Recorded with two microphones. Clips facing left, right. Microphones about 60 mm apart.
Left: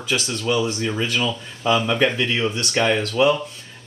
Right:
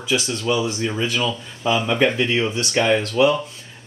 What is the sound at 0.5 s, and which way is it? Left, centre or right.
Speech, left.